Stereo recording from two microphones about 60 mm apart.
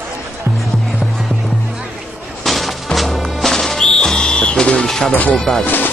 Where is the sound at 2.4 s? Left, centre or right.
Centre.